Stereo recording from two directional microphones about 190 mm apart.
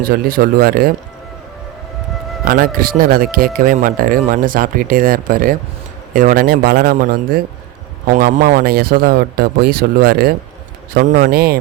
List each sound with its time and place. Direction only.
0.0 s speech: 50° right (ahead or behind)
2.4 s speech: 50° right (ahead or behind)